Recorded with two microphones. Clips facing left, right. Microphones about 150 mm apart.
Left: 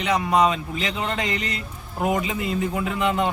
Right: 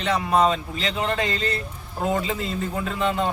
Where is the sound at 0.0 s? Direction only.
15° left (ahead or behind).